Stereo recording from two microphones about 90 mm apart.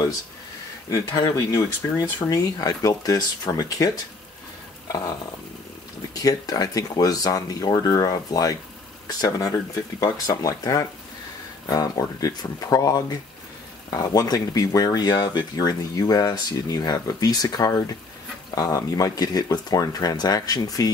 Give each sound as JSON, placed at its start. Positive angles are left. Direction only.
{"t": 0.8, "sound": "speech", "side_deg": 40}
{"t": 6.1, "sound": "speech", "side_deg": 40}
{"t": 10.0, "sound": "speech", "side_deg": 45}